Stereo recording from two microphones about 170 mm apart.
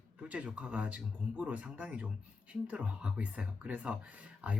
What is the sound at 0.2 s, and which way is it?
Speech, 5° right (ahead or behind).